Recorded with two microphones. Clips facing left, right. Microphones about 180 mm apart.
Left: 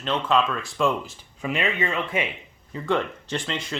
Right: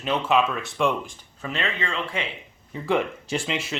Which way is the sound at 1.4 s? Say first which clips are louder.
Left 3 dB; 10° left (ahead or behind).